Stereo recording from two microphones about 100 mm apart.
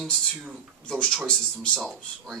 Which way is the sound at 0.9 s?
10° left (ahead or behind).